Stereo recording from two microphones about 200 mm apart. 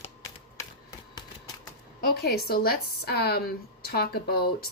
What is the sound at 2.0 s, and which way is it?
Speech, 50° left (ahead or behind).